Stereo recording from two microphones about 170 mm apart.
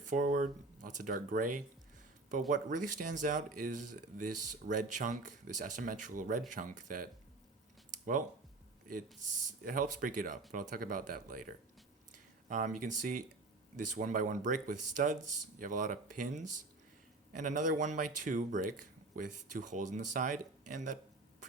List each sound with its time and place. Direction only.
0.1 s speech: 50° right (ahead or behind)
9.1 s speech: 50° right (ahead or behind)